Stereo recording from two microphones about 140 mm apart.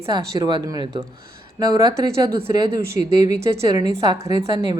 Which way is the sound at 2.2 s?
40° right (ahead or behind).